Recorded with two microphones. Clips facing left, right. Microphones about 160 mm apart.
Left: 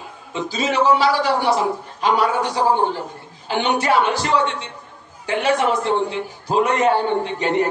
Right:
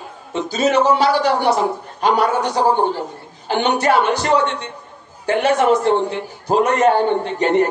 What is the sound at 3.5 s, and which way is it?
Speech, 45° right (ahead or behind).